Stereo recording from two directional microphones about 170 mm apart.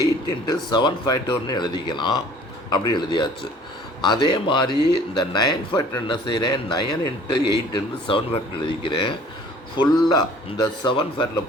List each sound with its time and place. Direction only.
0.0 s speech: 25° left (ahead or behind)